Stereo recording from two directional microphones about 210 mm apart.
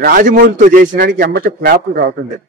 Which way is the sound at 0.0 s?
40° right (ahead or behind).